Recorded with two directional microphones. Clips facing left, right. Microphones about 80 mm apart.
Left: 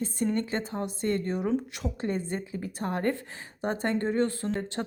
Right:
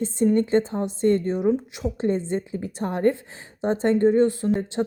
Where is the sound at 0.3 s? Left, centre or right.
Right.